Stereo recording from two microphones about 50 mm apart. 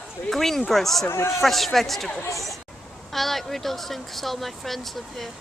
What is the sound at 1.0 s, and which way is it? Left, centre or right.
Speech, left.